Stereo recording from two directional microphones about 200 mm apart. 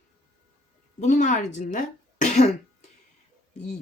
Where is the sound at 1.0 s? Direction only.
40° left (ahead or behind).